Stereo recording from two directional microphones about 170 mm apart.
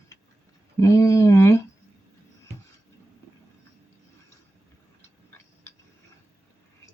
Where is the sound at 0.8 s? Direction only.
20° left (ahead or behind).